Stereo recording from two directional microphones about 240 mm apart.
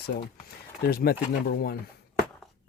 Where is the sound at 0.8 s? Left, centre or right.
Left.